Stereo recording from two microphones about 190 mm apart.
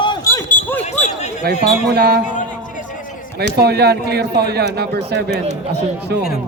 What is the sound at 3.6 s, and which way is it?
Speech, 60° right (ahead or behind).